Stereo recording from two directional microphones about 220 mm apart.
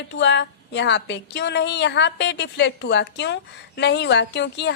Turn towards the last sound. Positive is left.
turn(degrees=50)  # may be behind; listen again after turning